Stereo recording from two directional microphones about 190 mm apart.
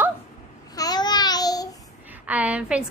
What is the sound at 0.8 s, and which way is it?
Babbling, 20° left (ahead or behind).